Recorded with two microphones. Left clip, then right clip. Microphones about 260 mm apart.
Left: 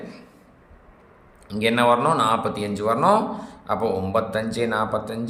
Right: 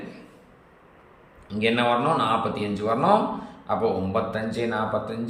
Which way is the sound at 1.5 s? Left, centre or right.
Centre.